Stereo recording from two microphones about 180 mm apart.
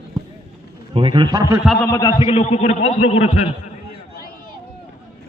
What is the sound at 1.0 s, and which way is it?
Speech, 30° right (ahead or behind).